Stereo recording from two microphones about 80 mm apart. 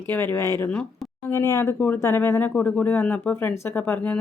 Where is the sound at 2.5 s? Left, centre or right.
Centre.